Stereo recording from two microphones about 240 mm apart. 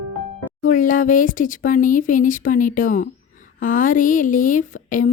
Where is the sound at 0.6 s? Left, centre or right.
Left.